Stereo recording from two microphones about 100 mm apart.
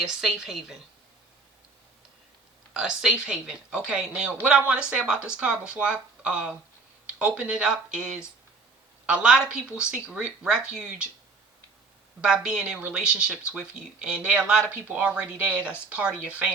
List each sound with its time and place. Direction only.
0.0 s a woman's voice: 5° right (ahead or behind)
2.7 s speech: 10° right (ahead or behind)
12.2 s speech: 10° right (ahead or behind)